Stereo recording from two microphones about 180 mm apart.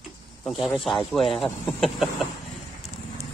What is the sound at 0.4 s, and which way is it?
Speech, centre (ahead or behind).